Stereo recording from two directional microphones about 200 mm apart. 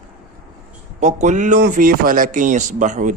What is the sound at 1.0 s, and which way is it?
A man's voice, 35° right (ahead or behind).